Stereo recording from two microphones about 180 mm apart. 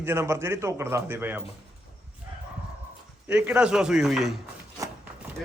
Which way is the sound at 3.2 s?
5° right (ahead or behind).